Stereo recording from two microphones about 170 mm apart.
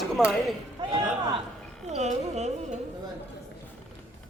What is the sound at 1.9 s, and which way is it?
Music, 40° right (ahead or behind).